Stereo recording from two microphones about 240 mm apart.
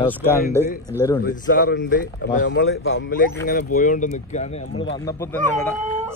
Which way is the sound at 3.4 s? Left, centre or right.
Left.